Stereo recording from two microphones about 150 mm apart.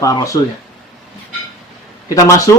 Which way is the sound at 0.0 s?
25° left (ahead or behind).